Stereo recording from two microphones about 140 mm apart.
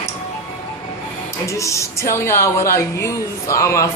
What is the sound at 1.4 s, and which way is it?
A woman's voice, 20° left (ahead or behind).